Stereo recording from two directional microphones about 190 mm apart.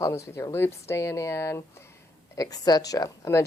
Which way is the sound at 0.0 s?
15° left (ahead or behind).